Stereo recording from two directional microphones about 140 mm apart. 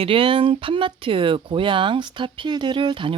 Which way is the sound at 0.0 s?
40° right (ahead or behind).